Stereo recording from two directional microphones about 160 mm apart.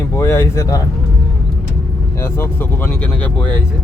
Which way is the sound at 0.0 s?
15° left (ahead or behind).